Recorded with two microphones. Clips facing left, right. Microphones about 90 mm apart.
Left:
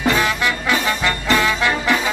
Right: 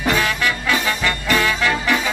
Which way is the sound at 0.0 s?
25° left (ahead or behind).